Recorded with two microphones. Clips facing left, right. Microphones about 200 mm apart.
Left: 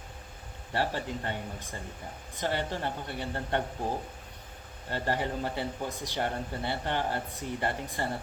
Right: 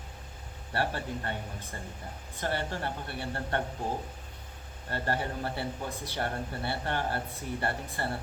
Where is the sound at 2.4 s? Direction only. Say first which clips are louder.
Left 1 dB; 20° left (ahead or behind).